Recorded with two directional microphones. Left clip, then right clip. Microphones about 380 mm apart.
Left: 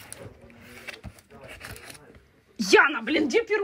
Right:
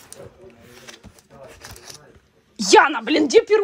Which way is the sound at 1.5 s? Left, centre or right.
Centre.